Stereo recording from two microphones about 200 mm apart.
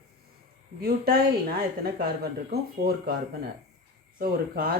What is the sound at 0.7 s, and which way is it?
A woman's voice, 50° right (ahead or behind).